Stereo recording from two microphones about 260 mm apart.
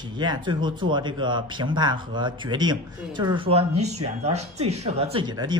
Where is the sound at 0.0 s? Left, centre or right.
Centre.